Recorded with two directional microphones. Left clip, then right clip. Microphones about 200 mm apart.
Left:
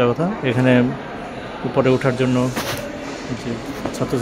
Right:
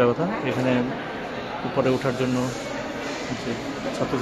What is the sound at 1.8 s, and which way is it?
Speech, 20° left (ahead or behind).